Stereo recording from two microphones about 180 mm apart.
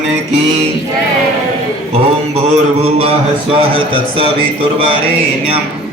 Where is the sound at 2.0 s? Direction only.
35° right (ahead or behind).